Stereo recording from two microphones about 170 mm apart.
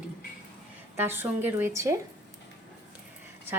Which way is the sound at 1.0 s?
10° right (ahead or behind).